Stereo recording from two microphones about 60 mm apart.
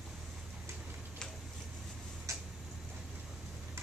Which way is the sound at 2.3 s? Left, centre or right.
Right.